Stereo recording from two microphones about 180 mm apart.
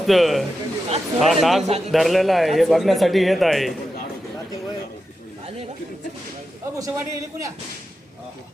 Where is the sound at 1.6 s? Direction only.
35° right (ahead or behind).